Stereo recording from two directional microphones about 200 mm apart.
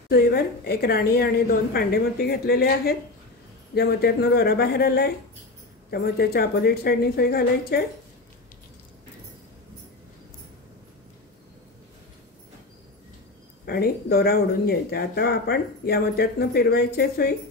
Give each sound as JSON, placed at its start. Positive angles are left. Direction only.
{"t": 0.1, "sound": "speech", "side_deg": 50}
{"t": 13.7, "sound": "speech", "side_deg": 50}